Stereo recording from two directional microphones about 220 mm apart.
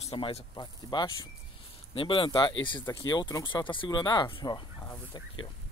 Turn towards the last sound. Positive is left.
turn(degrees=20)  # may be behind; listen again after turning